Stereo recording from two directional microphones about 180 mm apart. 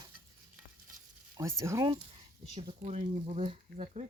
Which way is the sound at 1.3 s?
15° right (ahead or behind).